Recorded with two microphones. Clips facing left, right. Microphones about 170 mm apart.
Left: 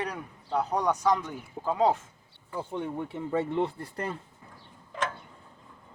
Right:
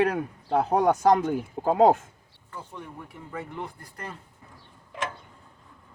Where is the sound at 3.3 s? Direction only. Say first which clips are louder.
Left 8 dB; 30° left (ahead or behind).